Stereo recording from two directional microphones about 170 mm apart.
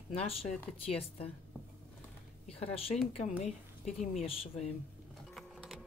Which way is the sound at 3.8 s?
Centre (ahead or behind).